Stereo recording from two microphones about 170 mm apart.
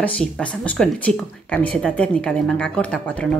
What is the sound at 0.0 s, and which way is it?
A woman's voice, 5° left (ahead or behind).